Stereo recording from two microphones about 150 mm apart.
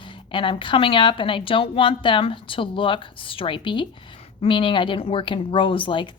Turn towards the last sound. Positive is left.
turn(degrees=30)  # may be behind; listen again after turning